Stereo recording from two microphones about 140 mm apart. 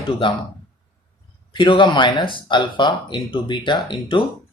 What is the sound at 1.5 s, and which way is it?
Speech, 35° left (ahead or behind).